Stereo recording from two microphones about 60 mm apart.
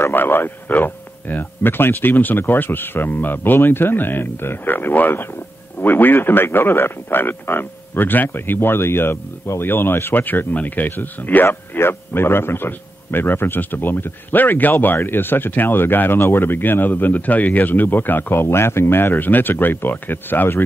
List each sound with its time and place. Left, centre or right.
0.0 s speech: left
11.4 s speech: left